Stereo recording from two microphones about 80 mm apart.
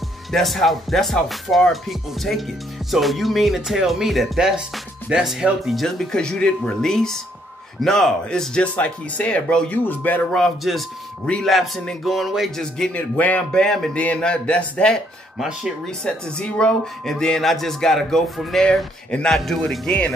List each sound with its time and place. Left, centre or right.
0.3 s speech: centre; by 10.2 s left
10.3 s speech: centre
11.5 s speech: centre
12.9 s speech: centre
15.3 s speech: centre
16.0 s speech: centre